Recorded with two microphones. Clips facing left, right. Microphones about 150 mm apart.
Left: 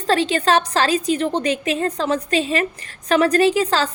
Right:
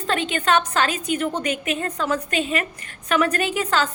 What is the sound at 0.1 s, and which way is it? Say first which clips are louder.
A woman's voice: left 4 dB; 35° left (ahead or behind).